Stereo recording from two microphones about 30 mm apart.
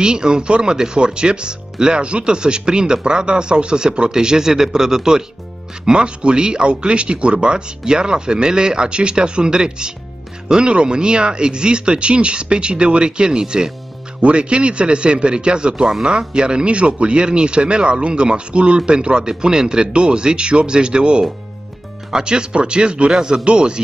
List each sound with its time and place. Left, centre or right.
0.0 s speech: right
5.9 s speech: right
14.2 s speech: right